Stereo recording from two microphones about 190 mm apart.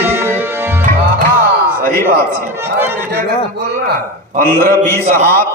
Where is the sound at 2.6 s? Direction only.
10° right (ahead or behind).